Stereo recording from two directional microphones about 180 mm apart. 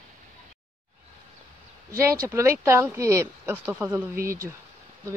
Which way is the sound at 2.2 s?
15° right (ahead or behind).